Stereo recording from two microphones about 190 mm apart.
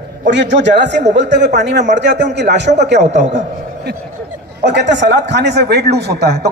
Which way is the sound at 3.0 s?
40° right (ahead or behind).